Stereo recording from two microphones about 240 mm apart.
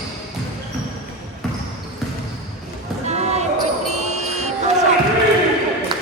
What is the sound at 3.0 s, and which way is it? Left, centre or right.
Basketball bounce, right.